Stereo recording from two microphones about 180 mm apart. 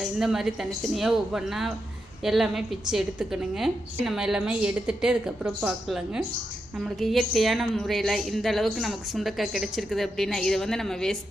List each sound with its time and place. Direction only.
0.0 s a woman's voice: centre (ahead or behind)